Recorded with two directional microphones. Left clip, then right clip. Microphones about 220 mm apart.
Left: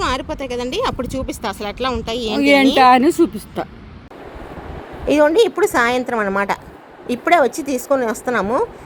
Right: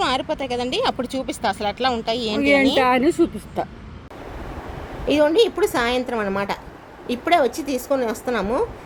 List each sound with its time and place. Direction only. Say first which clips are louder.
0.0 s speech: left 1 dB; 5° right (ahead or behind)
2.7 s a woman's voice: left 6 dB; 50° left (ahead or behind)
5.1 s a woman's voice: left 4 dB; 15° left (ahead or behind)